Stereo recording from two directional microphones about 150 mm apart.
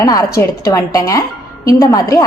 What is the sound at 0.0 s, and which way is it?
A woman's voice, 25° left (ahead or behind).